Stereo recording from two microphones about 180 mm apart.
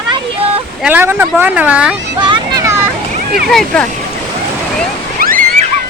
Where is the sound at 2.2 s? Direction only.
25° right (ahead or behind).